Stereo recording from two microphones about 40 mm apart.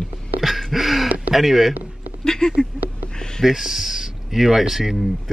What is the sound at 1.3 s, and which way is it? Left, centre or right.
Speech, centre.